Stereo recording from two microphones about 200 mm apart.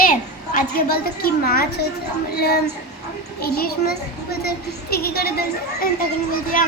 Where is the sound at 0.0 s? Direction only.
45° left (ahead or behind).